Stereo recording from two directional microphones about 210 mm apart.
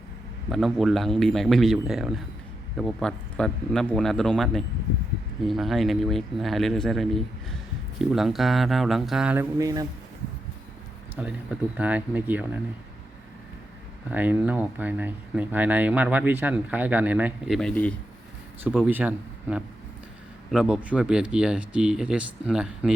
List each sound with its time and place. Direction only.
0.5 s speech: centre (ahead or behind); by 9.8 s 15° right (ahead or behind)
11.1 s speech: 5° right (ahead or behind)
14.1 s speech: 10° right (ahead or behind)
18.9 s speech: 5° right (ahead or behind)